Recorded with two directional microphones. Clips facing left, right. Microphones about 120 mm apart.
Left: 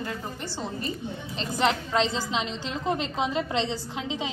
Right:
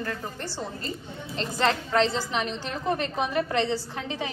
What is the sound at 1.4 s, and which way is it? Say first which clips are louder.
A woman's voice: even; 15° left (ahead or behind).